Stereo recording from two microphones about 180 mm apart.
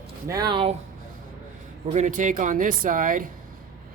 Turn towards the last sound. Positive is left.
turn(degrees=-50)  # may be behind; listen again after turning